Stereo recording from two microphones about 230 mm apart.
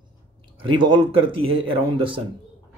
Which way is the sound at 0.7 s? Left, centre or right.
Right.